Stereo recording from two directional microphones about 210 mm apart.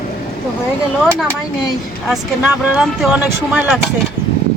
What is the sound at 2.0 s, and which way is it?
Speech, 5° right (ahead or behind).